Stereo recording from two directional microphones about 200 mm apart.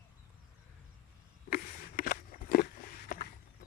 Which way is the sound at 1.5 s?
45° left (ahead or behind).